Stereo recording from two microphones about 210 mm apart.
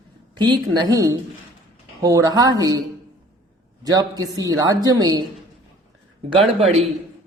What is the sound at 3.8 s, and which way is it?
A woman's voice, 15° right (ahead or behind).